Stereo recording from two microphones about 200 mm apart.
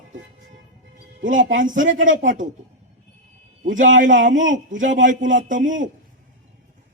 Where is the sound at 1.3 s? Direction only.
40° right (ahead or behind).